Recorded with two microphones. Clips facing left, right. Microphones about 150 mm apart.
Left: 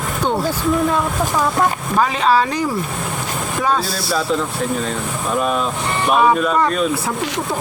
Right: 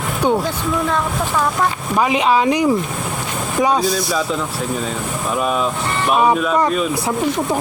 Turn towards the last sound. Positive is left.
turn(degrees=-5)  # may be behind; listen again after turning